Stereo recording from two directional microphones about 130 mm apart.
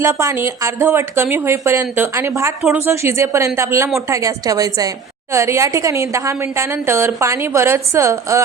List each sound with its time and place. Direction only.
0.0 s a woman's voice: 20° right (ahead or behind)